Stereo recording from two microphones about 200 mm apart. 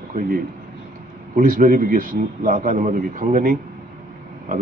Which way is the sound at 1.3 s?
45° right (ahead or behind).